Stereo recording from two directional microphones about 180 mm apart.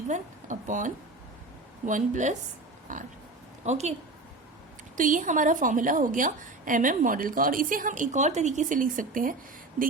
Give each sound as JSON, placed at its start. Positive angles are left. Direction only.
{"t": 0.1, "sound": "a woman's voice", "side_deg": -45}
{"t": 4.9, "sound": "a woman's voice", "side_deg": -45}